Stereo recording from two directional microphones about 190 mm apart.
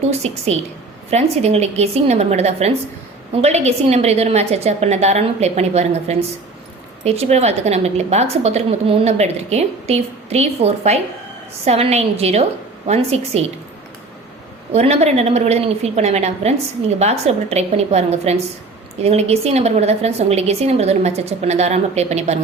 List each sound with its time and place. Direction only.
0.1 s a woman's voice: 35° right (ahead or behind)
14.7 s a woman's voice: 35° right (ahead or behind)